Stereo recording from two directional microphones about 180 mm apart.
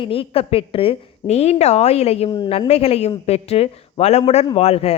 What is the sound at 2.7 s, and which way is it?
A woman's voice, 35° left (ahead or behind).